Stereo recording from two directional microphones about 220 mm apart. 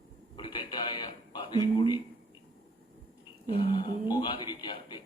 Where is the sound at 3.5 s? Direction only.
20° left (ahead or behind).